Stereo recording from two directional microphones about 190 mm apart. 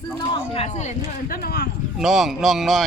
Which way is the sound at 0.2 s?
25° left (ahead or behind).